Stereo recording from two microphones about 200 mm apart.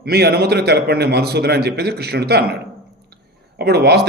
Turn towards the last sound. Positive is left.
turn(degrees=-55)  # may be behind; listen again after turning